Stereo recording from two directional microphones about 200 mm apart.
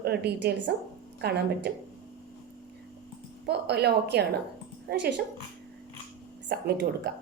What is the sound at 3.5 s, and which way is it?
A woman's voice, 55° right (ahead or behind).